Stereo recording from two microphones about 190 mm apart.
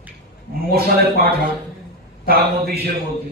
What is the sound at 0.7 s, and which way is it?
A man's voice, 55° right (ahead or behind).